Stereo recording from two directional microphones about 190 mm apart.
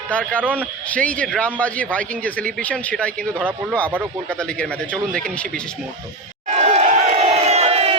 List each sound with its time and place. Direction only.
0.1 s a man's voice: 5° left (ahead or behind)
0.4 s speech: 10° right (ahead or behind)
0.9 s a man's voice: 5° left (ahead or behind)
3.8 s speech: 10° right (ahead or behind)
4.3 s speech: 5° left (ahead or behind)
6.6 s crowd: 40° right (ahead or behind)